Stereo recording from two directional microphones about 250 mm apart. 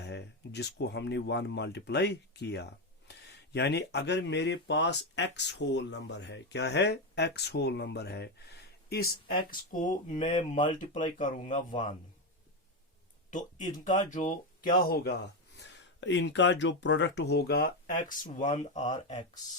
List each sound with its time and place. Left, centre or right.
0.0 s speech: left
13.3 s speech: left